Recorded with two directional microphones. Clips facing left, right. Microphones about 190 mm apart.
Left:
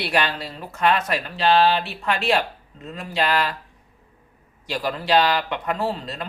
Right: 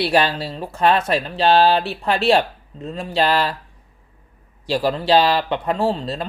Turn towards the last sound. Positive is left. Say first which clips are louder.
# right 5 dB
turn(degrees=-30)  # may be behind; listen again after turning